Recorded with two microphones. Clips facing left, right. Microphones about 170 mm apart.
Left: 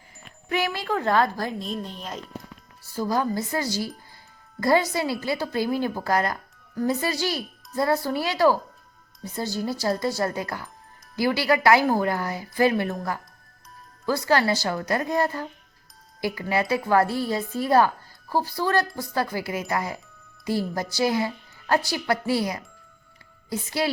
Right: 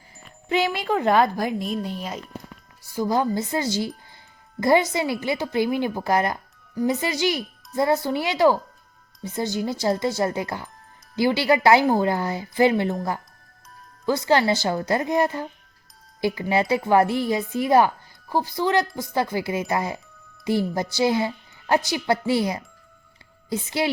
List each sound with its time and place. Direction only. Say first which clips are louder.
0.4 s a woman's voice: right 3 dB; 20° right (ahead or behind)
14.0 s a woman's voice: right 2 dB; 20° right (ahead or behind)